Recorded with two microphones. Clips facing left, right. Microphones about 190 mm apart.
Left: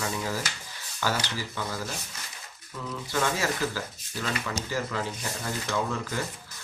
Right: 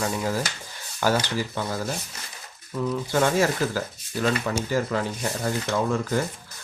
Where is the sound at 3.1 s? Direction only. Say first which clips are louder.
Right 6 dB; 45° right (ahead or behind).